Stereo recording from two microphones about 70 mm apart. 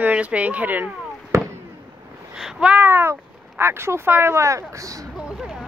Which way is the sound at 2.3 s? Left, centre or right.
Centre.